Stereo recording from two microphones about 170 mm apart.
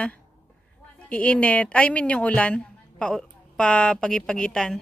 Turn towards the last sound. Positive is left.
turn(degrees=5)  # may be behind; listen again after turning